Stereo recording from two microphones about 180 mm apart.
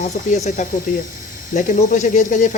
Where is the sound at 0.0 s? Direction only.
40° left (ahead or behind).